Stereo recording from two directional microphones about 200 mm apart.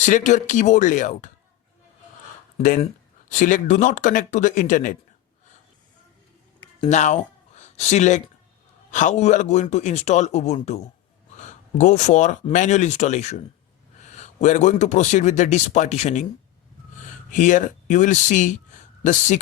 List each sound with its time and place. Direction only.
0.0 s speech: 40° left (ahead or behind)
2.6 s speech: 40° left (ahead or behind)
6.8 s speech: 35° left (ahead or behind)